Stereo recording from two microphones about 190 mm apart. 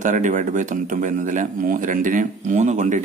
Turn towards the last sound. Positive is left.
turn(degrees=-40)  # may be behind; listen again after turning